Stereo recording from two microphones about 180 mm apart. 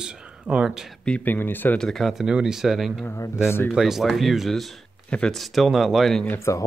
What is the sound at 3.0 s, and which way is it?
Speech, 15° left (ahead or behind).